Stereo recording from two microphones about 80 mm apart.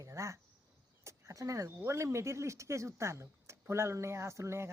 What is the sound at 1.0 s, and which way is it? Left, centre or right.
Speech, right.